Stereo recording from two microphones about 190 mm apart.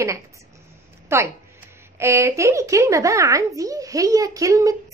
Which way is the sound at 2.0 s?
15° right (ahead or behind).